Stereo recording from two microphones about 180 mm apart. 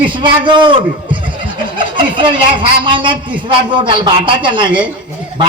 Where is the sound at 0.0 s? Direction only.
25° right (ahead or behind).